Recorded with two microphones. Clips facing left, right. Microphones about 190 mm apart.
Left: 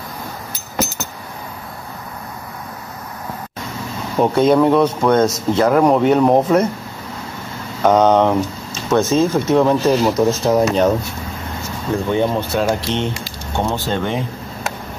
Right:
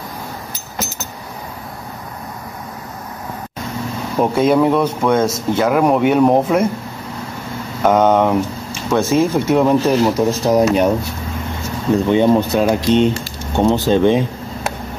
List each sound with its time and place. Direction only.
4.2 s speech: 5° right (ahead or behind)
7.8 s speech: 5° right (ahead or behind)
11.9 s speech: 20° right (ahead or behind)